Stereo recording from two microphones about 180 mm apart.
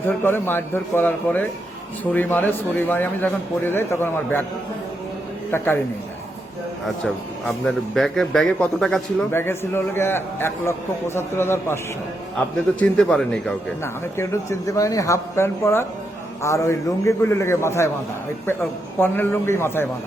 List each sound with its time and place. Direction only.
0.0 s a man's voice: 10° left (ahead or behind)
5.5 s a man's voice: 10° left (ahead or behind)
6.8 s a man's voice: centre (ahead or behind)
13.0 s a man's voice: 5° left (ahead or behind)